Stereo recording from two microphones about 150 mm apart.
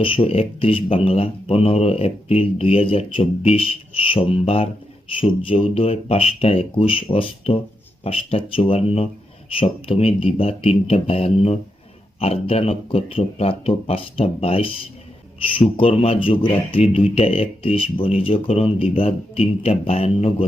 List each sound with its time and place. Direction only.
0.0 s speech: 35° left (ahead or behind)
15.8 s speech: 40° left (ahead or behind)